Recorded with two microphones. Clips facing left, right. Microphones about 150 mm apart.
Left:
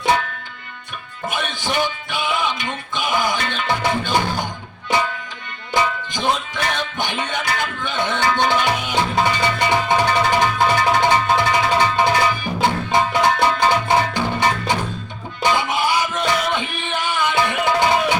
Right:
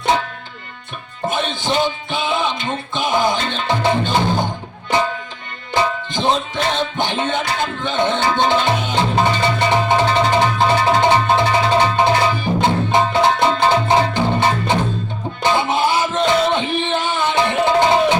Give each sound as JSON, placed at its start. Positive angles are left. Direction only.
{"t": 1.3, "sound": "music", "side_deg": -20}
{"t": 5.7, "sound": "music", "side_deg": -25}
{"t": 15.4, "sound": "music", "side_deg": -25}